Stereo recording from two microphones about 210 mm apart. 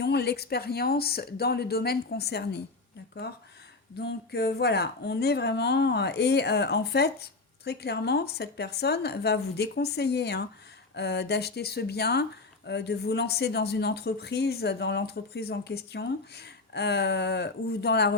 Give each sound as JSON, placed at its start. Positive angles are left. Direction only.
{"t": 0.0, "sound": "speech", "side_deg": 50}
{"t": 3.9, "sound": "speech", "side_deg": 50}